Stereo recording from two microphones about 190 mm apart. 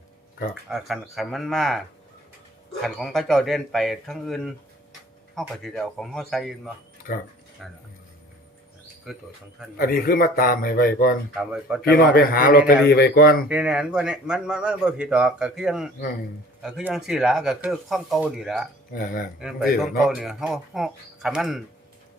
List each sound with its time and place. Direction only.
0.7 s a man's voice: centre (ahead or behind)
2.8 s a man's voice: centre (ahead or behind)
7.6 s a man's voice: centre (ahead or behind)
9.1 s a man's voice: centre (ahead or behind)
9.7 s a man's voice: 50° left (ahead or behind)
11.3 s a man's voice: 5° right (ahead or behind)
11.9 s a man's voice: 50° left (ahead or behind)
13.5 s a man's voice: 5° right (ahead or behind)